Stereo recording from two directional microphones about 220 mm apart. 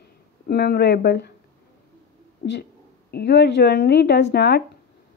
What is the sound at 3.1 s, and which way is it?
Speech, 50° left (ahead or behind).